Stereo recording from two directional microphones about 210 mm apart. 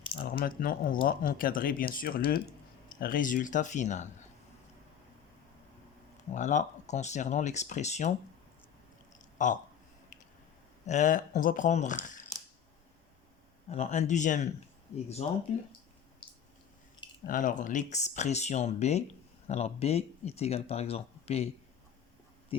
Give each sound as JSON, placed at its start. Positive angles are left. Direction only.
{"t": 0.2, "sound": "speech", "side_deg": 45}
{"t": 6.1, "sound": "speech", "side_deg": 35}
{"t": 9.4, "sound": "speech", "side_deg": 35}
{"t": 10.8, "sound": "speech", "side_deg": 35}
{"t": 13.7, "sound": "speech", "side_deg": 30}
{"t": 16.2, "sound": "a sound", "side_deg": 25}
{"t": 17.2, "sound": "speech", "side_deg": 40}